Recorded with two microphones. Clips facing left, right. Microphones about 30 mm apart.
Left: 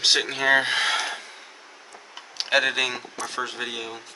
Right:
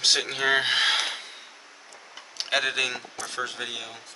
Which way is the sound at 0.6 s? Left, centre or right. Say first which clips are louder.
Even; centre.